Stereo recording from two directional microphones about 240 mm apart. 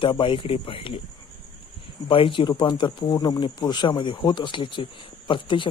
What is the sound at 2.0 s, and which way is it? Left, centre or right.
Speech, left.